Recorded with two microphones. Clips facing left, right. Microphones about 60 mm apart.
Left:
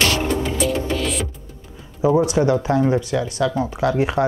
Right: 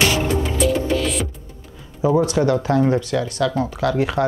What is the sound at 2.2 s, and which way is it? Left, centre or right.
Speech, centre.